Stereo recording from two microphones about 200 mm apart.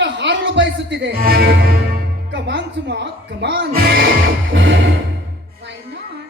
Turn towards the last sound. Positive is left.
turn(degrees=-65)  # may be behind; listen again after turning